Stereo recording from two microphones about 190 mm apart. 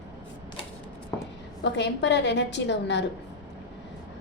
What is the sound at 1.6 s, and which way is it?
A woman's voice, 65° left (ahead or behind).